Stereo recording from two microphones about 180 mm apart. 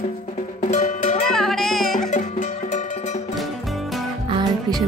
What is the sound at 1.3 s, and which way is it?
Music, centre (ahead or behind).